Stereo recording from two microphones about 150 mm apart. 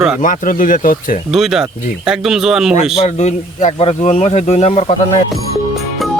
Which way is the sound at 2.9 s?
45° left (ahead or behind).